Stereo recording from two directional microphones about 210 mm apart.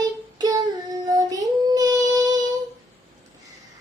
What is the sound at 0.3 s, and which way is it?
Child singing, 20° right (ahead or behind).